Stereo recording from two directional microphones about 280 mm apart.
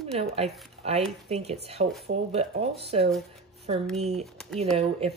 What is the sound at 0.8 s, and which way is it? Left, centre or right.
Speech, right.